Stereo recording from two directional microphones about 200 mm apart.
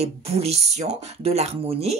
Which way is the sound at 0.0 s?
30° right (ahead or behind).